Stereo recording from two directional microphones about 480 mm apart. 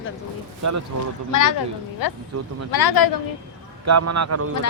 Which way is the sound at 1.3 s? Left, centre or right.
Left.